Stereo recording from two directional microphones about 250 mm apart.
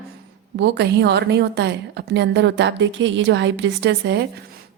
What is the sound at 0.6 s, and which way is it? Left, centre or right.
A woman's voice, right.